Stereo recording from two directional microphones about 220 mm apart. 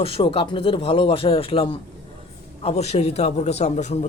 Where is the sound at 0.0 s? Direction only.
25° left (ahead or behind).